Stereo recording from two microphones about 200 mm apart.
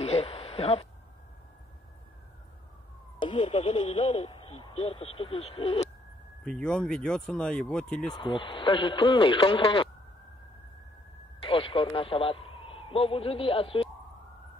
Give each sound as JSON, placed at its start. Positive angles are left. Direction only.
{"t": 0.0, "sound": "a sound", "side_deg": 30}
{"t": 3.2, "sound": "speech", "side_deg": 30}
{"t": 6.4, "sound": "speech", "side_deg": 5}
{"t": 8.1, "sound": "a man's voice", "side_deg": 25}
{"t": 11.4, "sound": "a man's voice", "side_deg": 25}